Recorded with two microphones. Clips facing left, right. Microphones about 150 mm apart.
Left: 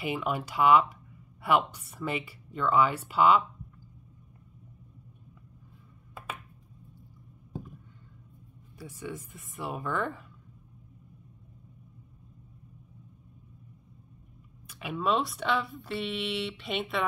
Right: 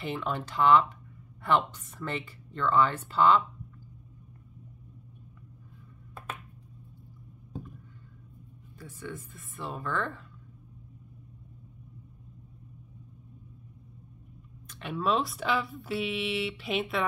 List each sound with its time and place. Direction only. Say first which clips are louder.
0.0 s speech: left 2 dB; 10° left (ahead or behind)
8.7 s speech: left 2 dB; 15° left (ahead or behind)
14.7 s speech: even; 5° left (ahead or behind)